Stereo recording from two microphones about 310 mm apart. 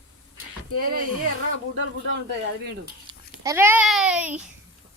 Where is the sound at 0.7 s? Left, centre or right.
Right.